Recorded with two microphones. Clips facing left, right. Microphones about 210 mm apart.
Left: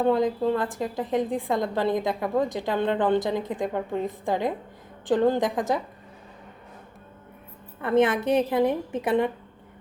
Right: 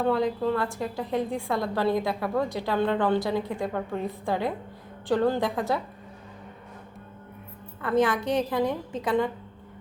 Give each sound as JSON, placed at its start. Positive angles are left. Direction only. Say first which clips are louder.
{"t": 0.0, "sound": "a woman's voice", "louder": "left 2 dB", "side_deg": 20}
{"t": 7.8, "sound": "a woman's voice", "louder": "left 3 dB", "side_deg": 20}